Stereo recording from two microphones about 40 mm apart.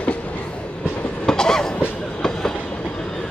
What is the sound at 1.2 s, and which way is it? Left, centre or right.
Train, centre.